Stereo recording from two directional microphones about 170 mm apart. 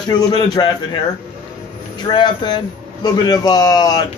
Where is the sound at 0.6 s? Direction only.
25° left (ahead or behind).